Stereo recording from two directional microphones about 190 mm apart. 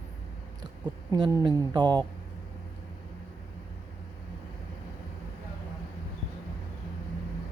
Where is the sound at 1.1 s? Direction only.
20° right (ahead or behind).